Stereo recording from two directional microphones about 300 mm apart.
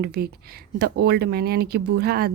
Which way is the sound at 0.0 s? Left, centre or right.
Right.